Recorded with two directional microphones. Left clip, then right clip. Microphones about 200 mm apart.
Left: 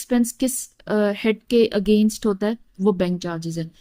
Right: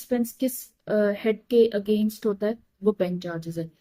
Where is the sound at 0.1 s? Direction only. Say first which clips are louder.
Left 4 dB; 55° left (ahead or behind).